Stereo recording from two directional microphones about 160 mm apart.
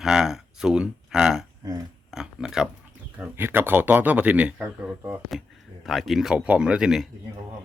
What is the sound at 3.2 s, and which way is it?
Speech, 15° right (ahead or behind).